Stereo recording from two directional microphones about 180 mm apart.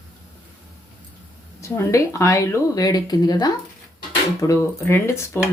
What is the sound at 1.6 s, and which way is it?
Speech, 15° left (ahead or behind).